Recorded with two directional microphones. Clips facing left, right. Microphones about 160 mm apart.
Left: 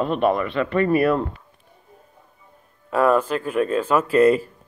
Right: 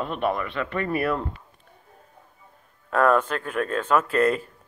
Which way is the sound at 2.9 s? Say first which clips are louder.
Left 2 dB; 5° left (ahead or behind).